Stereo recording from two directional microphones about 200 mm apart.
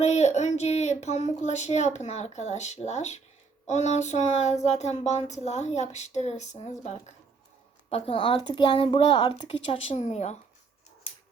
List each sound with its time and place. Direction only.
0.0 s speech: 35° left (ahead or behind)